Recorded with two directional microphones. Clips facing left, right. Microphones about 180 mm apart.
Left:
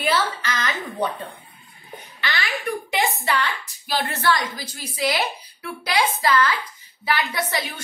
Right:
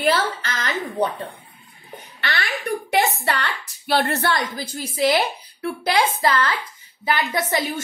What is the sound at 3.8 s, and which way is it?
A woman's voice, 65° right (ahead or behind).